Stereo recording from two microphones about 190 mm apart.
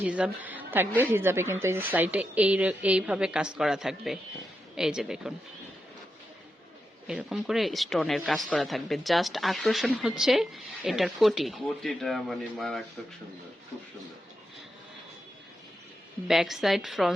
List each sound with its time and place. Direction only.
0.0 s a woman's voice: 5° right (ahead or behind)
7.1 s speech: 5° right (ahead or behind)
16.2 s speech: centre (ahead or behind)